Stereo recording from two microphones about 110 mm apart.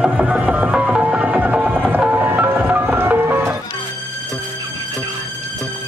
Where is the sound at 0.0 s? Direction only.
10° right (ahead or behind).